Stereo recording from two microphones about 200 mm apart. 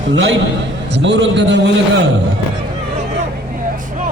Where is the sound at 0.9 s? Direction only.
60° right (ahead or behind).